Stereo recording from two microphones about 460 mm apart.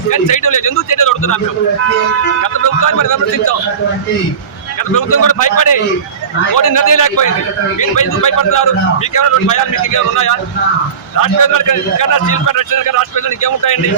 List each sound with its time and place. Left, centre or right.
0.1 s speech: left
2.4 s speech: left
4.9 s a man's voice: left